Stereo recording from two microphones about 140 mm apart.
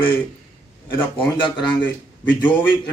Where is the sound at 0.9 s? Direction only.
35° left (ahead or behind).